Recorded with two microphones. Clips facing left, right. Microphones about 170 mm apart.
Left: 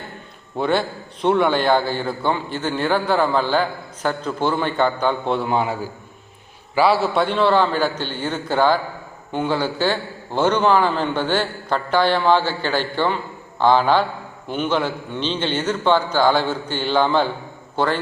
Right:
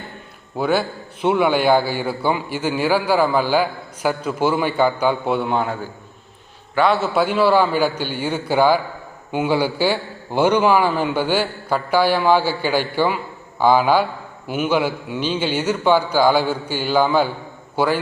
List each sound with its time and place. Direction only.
0.5 s a man's voice: 5° right (ahead or behind)